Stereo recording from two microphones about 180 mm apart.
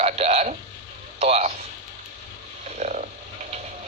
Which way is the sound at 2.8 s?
40° right (ahead or behind).